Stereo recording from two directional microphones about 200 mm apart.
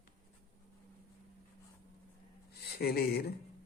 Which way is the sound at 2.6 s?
50° left (ahead or behind).